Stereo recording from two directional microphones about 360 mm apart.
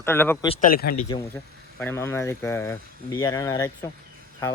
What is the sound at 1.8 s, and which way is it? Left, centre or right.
Speech, centre.